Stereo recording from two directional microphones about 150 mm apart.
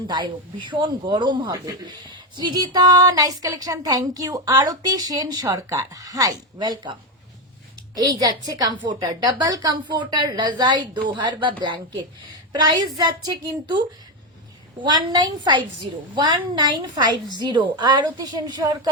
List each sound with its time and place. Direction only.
0.1 s speech: 30° right (ahead or behind)
7.9 s speech: 25° right (ahead or behind)
14.8 s speech: 30° right (ahead or behind)